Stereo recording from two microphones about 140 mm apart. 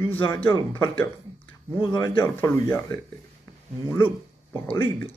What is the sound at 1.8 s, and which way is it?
Speech, 30° left (ahead or behind).